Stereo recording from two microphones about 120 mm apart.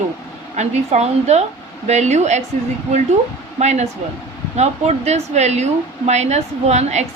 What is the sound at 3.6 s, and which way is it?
Speech, 70° right (ahead or behind).